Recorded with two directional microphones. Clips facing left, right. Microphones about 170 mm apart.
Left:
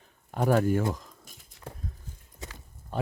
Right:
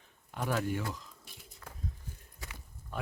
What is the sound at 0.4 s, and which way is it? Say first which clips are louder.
Speech: left 9 dB; 45° left (ahead or behind).